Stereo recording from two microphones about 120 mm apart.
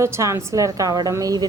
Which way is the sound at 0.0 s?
25° right (ahead or behind).